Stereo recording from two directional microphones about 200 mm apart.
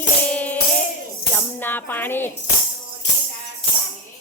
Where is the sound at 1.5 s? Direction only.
10° left (ahead or behind).